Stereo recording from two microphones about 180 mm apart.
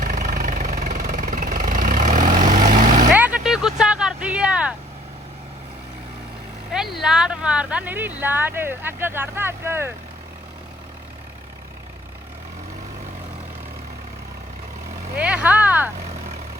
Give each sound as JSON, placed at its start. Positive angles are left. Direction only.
{"t": 0.0, "sound": "vehicle", "side_deg": -50}
{"t": 3.2, "sound": "a sound", "side_deg": -5}
{"t": 6.7, "sound": "vehicle", "side_deg": 0}
{"t": 15.2, "sound": "vehicle", "side_deg": -5}